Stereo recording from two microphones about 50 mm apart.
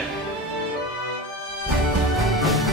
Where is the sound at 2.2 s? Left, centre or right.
Centre.